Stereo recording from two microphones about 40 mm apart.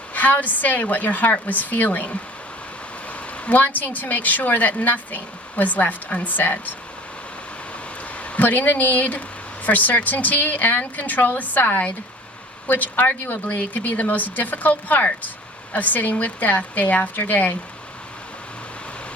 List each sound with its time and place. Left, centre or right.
0.1 s speech: left
3.1 s speech: left
8.4 s speech: left